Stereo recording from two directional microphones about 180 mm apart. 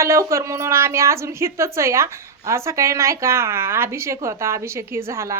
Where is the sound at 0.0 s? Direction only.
15° right (ahead or behind).